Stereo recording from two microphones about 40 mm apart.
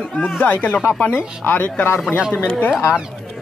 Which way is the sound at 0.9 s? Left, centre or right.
Left.